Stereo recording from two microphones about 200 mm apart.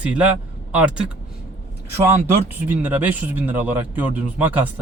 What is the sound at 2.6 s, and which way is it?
Speech, 10° right (ahead or behind).